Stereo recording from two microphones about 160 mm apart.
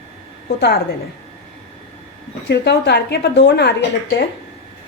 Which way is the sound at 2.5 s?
90° left.